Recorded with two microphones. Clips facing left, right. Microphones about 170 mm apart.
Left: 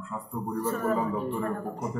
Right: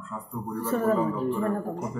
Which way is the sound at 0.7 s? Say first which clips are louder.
Right 5 dB; 30° right (ahead or behind).